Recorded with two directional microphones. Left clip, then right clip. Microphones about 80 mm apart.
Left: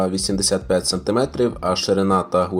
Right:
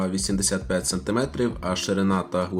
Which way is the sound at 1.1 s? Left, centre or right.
Centre.